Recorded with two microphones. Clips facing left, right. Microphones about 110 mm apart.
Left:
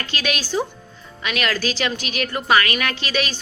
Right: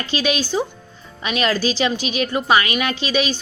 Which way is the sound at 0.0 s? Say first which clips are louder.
Right 5 dB; 25° right (ahead or behind).